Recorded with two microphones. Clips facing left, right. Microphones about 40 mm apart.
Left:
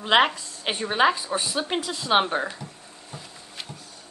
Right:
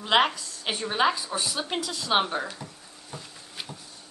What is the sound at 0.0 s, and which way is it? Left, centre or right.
A woman's voice, centre.